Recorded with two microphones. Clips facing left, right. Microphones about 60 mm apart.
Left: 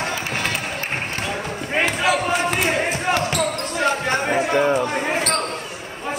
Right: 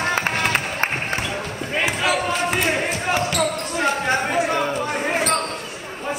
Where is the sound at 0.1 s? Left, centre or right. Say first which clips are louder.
Right 4 dB; right.